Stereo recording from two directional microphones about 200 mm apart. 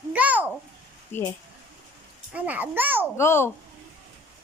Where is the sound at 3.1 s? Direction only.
15° left (ahead or behind).